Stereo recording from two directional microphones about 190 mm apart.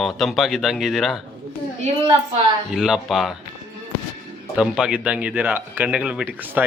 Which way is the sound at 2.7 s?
Centre (ahead or behind).